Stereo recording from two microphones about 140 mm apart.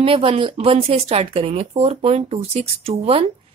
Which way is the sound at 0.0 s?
40° right (ahead or behind).